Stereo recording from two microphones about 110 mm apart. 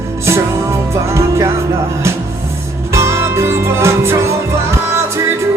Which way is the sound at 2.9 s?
25° right (ahead or behind).